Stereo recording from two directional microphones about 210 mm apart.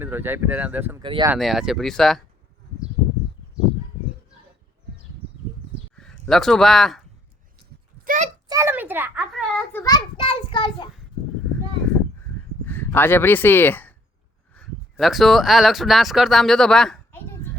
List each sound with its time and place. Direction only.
0.0 s speech: 10° right (ahead or behind)
1.0 s speech: 25° right (ahead or behind)
1.3 s speech: centre (ahead or behind)
6.0 s speech: centre (ahead or behind)
8.0 s a sound: 40° right (ahead or behind)
8.4 s a child's voice: 15° right (ahead or behind)
9.3 s speech: centre (ahead or behind)
9.8 s a child's voice: 20° left (ahead or behind)
12.6 s speech: 10° left (ahead or behind)